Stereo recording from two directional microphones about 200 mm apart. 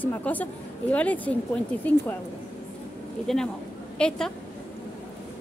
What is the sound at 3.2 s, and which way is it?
Speech, 5° left (ahead or behind).